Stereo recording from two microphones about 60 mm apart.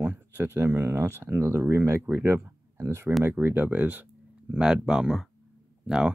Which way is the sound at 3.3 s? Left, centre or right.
Right.